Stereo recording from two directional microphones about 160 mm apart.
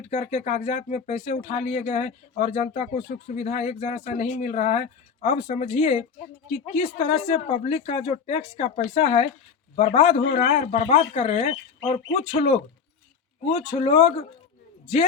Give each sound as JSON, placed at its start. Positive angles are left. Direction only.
{"t": 0.1, "sound": "speech", "side_deg": 45}